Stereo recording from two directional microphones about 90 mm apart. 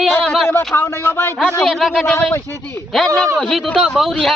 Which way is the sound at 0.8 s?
25° left (ahead or behind).